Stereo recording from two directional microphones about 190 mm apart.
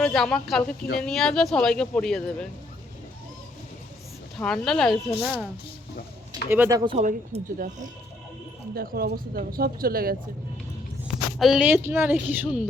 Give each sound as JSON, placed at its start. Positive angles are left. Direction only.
{"t": 0.0, "sound": "speech", "side_deg": 5}
{"t": 4.4, "sound": "speech", "side_deg": 0}
{"t": 6.5, "sound": "a woman's voice", "side_deg": -15}
{"t": 6.9, "sound": "speech", "side_deg": -35}
{"t": 11.3, "sound": "a woman's voice", "side_deg": 0}